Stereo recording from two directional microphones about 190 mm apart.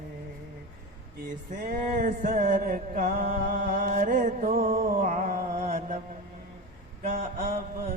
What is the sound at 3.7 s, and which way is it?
Mantra, 40° right (ahead or behind).